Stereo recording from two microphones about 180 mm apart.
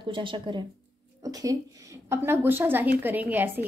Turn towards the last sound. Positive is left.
turn(degrees=-10)  # may be behind; listen again after turning